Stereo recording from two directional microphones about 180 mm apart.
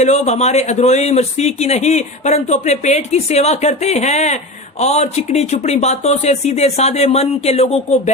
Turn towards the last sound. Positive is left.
turn(degrees=35)  # may be behind; listen again after turning